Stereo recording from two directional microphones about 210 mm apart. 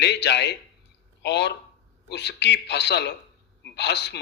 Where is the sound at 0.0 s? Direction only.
55° left (ahead or behind).